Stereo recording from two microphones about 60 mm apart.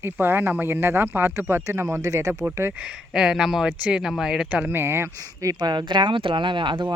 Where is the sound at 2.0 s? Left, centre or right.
Right.